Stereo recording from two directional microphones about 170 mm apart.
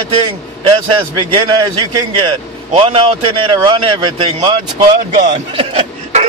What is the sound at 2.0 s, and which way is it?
A man's voice, 30° right (ahead or behind).